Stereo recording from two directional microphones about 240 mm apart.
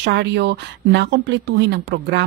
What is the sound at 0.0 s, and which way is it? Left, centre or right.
Speech, right.